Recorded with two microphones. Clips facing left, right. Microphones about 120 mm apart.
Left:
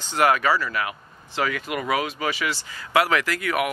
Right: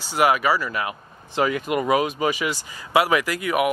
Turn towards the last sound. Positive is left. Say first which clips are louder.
# right 2 dB
turn(degrees=-15)  # may be behind; listen again after turning